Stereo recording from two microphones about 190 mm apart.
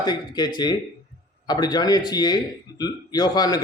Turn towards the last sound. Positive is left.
turn(degrees=20)  # may be behind; listen again after turning